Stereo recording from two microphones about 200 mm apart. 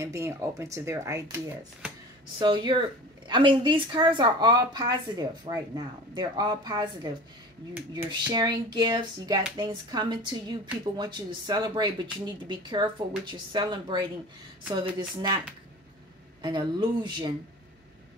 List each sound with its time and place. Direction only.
0.0 s a woman's voice: 15° right (ahead or behind)
8.1 s a woman's voice: 20° right (ahead or behind)
16.4 s a woman's voice: 20° right (ahead or behind)